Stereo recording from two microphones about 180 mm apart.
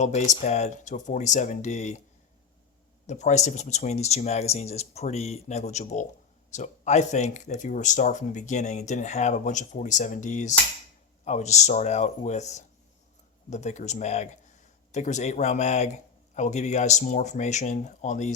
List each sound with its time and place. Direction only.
0.0 s speech: 40° left (ahead or behind)
3.1 s speech: 40° left (ahead or behind)